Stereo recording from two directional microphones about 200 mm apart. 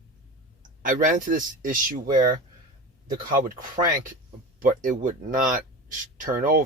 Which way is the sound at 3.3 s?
40° right (ahead or behind).